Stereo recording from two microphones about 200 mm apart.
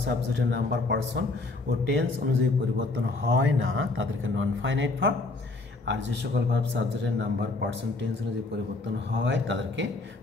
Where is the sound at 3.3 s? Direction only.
70° right (ahead or behind).